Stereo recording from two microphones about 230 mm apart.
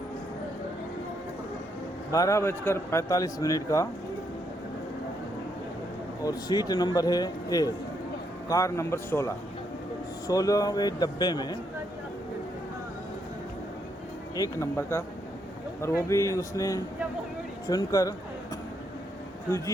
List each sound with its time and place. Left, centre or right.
2.1 s a man's voice: centre
6.2 s a man's voice: centre
14.3 s a man's voice: centre
19.5 s a man's voice: centre